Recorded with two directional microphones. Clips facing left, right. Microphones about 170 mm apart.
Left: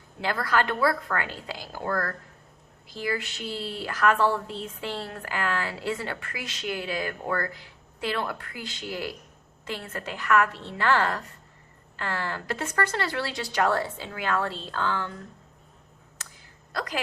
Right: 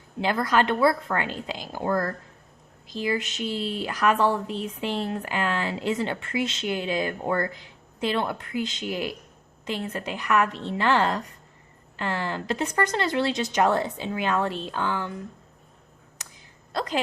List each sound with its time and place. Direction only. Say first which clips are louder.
0.2 s speech: right 3 dB; 20° right (ahead or behind)
16.2 s hiccup: even; 15° right (ahead or behind)
16.7 s speech: right 4 dB; 25° right (ahead or behind)